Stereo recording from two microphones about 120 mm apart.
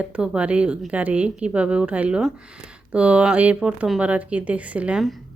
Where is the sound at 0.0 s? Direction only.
10° right (ahead or behind).